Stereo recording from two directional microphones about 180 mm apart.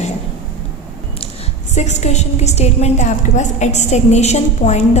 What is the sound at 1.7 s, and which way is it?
A woman's voice, 40° left (ahead or behind).